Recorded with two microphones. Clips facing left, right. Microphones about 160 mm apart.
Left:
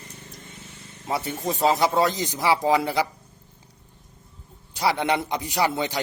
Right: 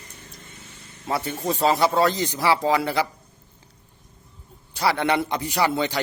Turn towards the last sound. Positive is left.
turn(degrees=15)  # may be behind; listen again after turning